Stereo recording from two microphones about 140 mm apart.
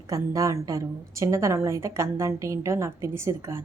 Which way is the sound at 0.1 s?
25° right (ahead or behind).